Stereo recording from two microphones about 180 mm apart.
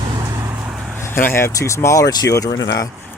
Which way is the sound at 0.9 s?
10° left (ahead or behind).